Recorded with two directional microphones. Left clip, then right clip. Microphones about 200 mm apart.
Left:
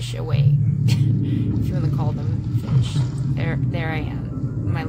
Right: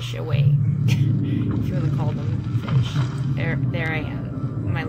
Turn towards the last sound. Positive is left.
turn(degrees=0)  # may be behind; listen again after turning